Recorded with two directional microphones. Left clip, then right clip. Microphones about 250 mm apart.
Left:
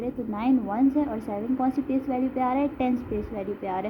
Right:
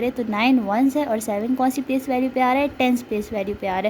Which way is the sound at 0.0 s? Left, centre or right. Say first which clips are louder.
Right 8 dB; right.